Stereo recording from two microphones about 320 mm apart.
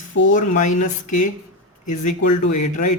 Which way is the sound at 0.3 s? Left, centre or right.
Left.